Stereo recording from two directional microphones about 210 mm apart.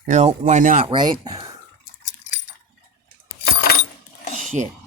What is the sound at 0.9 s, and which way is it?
Speech, 20° right (ahead or behind).